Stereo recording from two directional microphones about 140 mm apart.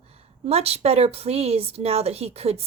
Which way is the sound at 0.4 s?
45° right (ahead or behind).